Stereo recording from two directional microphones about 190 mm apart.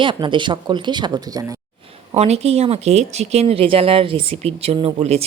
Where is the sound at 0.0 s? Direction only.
25° right (ahead or behind).